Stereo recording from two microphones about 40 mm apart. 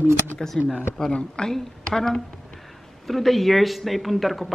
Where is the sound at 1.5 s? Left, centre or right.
Centre.